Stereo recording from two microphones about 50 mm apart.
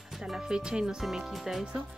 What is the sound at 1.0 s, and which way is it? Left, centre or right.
Speech, centre.